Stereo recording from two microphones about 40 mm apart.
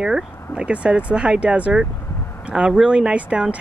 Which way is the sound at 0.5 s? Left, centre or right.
Right.